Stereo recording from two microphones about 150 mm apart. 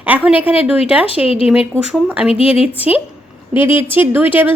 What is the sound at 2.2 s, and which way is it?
Speech, 40° left (ahead or behind).